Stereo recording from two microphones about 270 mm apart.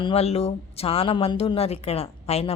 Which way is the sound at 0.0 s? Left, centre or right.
Left.